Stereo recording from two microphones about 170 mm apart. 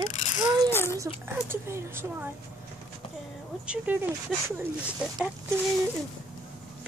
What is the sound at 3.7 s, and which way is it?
A woman's voice, 10° right (ahead or behind).